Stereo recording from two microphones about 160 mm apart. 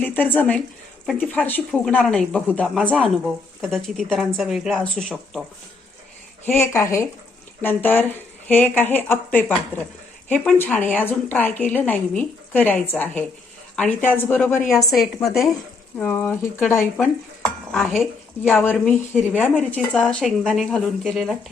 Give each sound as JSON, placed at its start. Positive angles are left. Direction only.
{"t": 0.0, "sound": "a woman's voice", "side_deg": 10}
{"t": 6.4, "sound": "a woman's voice", "side_deg": 15}
{"t": 14.7, "sound": "a woman's voice", "side_deg": 0}
{"t": 18.4, "sound": "a woman's voice", "side_deg": 15}
{"t": 20.4, "sound": "speech", "side_deg": -5}